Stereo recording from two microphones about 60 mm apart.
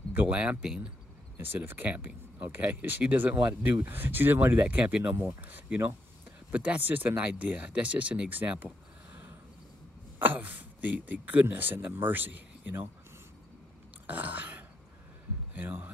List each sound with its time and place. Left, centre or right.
0.3 s speech: centre
1.4 s speech: right
10.1 s throat clearing: right
11.4 s speech: right
14.0 s throat clearing: right
15.5 s speech: right